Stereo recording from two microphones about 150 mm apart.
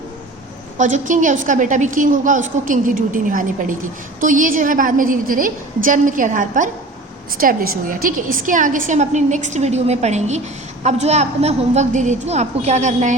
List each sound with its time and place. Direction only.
0.8 s a woman's voice: 55° right (ahead or behind)
7.3 s a woman's voice: 70° right (ahead or behind); by 13.1 s 50° right (ahead or behind)